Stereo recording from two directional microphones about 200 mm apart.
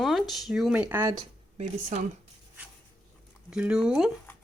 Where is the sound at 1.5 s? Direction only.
35° right (ahead or behind).